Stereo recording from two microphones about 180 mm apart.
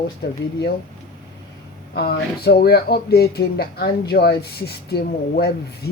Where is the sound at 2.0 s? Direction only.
60° left (ahead or behind).